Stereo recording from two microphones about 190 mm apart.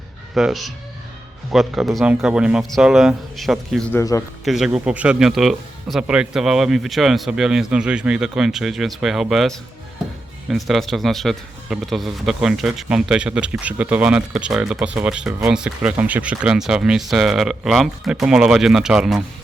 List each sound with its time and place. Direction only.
0.3 s speech: centre (ahead or behind)
3.9 s speech: 15° left (ahead or behind)
4.4 s speech: centre (ahead or behind)